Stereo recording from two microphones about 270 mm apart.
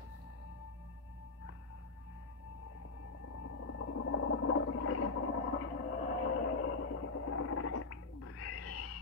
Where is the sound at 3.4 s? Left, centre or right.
Left.